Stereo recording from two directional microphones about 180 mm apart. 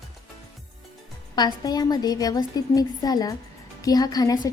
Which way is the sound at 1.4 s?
25° left (ahead or behind).